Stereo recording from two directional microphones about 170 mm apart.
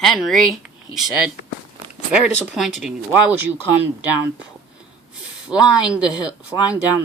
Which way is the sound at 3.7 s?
10° right (ahead or behind).